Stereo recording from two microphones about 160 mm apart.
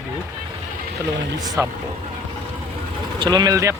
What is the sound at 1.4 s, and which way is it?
Speech, 20° right (ahead or behind).